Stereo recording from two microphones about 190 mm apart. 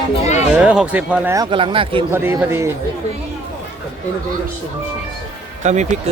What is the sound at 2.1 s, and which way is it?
Speech, 10° right (ahead or behind).